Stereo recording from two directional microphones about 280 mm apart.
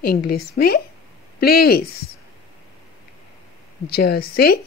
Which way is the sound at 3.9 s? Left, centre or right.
Left.